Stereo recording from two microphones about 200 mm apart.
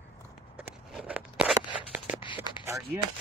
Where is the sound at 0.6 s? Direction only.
5° right (ahead or behind).